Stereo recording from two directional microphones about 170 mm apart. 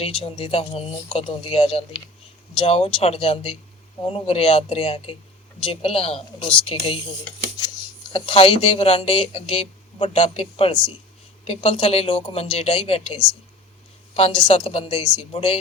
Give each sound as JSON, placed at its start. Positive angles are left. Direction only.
{"t": 0.0, "sound": "speech", "side_deg": 35}
{"t": 8.1, "sound": "speech", "side_deg": 30}